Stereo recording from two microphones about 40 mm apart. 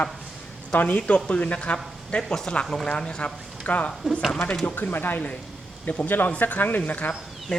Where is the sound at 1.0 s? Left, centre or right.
Left.